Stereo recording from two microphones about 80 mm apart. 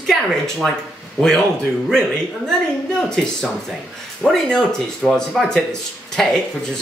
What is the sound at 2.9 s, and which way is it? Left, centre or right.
Speech, centre.